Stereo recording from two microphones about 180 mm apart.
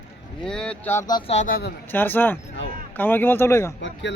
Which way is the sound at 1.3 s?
50° left (ahead or behind).